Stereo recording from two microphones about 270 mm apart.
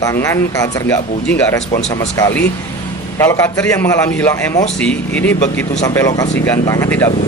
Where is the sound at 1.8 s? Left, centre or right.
Left.